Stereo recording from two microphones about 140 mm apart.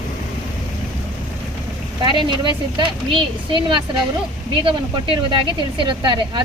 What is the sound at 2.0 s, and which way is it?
Speech, 35° right (ahead or behind).